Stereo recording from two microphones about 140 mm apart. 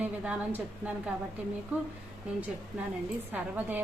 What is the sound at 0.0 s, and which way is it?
A woman's voice, 10° right (ahead or behind).